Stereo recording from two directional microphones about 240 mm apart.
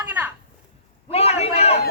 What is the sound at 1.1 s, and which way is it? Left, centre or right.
Speech, left.